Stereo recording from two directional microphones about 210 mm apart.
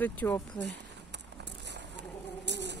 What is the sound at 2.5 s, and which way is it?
Insect, 55° right (ahead or behind).